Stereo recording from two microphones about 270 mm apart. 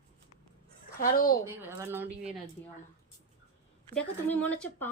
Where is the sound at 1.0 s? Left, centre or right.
Left.